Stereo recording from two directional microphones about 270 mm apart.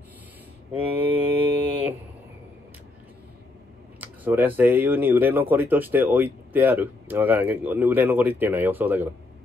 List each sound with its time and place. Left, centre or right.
0.9 s mantra: centre
4.0 s speech: centre